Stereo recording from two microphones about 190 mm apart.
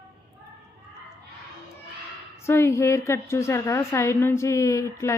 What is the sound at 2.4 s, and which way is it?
A woman's voice, 15° left (ahead or behind).